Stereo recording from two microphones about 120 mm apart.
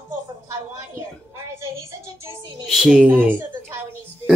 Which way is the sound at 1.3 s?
20° right (ahead or behind).